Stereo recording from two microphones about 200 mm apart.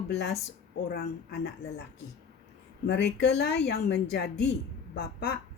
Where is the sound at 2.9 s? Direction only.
60° left (ahead or behind).